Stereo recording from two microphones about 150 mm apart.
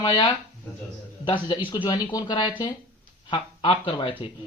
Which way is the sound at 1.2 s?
30° left (ahead or behind).